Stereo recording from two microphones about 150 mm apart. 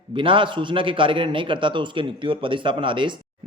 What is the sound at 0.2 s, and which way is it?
Speech, 35° right (ahead or behind).